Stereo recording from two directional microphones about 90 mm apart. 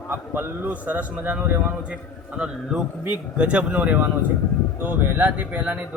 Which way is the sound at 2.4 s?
10° right (ahead or behind).